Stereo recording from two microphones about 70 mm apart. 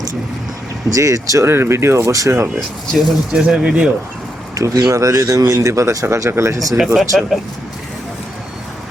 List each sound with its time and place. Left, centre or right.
0.9 s speech: right
1.5 s speech: right
3.3 s speech: centre
4.5 s speech: right
5.5 s speech: right
6.7 s speech: centre